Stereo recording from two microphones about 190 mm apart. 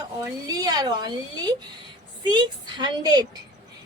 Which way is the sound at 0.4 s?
20° right (ahead or behind).